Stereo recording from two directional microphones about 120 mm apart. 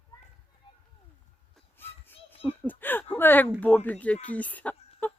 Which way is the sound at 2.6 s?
15° left (ahead or behind).